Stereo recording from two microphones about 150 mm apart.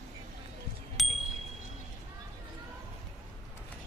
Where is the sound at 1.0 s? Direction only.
Centre (ahead or behind).